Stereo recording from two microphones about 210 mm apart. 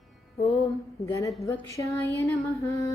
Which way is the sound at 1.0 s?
15° left (ahead or behind).